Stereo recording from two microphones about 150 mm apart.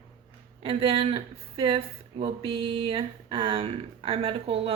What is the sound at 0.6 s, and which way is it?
Speech, 40° right (ahead or behind).